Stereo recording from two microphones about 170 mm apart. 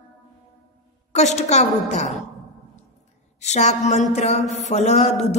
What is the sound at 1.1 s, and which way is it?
A woman's voice, 40° left (ahead or behind).